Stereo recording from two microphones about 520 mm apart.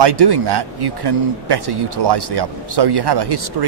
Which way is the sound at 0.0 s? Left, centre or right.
Right.